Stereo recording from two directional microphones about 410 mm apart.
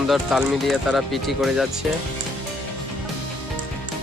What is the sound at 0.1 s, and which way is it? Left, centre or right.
Speech, centre.